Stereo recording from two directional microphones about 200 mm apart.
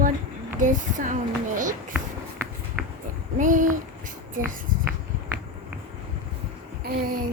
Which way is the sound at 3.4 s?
40° right (ahead or behind).